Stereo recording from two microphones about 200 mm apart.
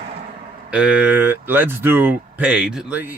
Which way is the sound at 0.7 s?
5° right (ahead or behind).